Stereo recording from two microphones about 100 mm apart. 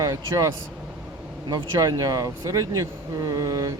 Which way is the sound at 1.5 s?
40° right (ahead or behind).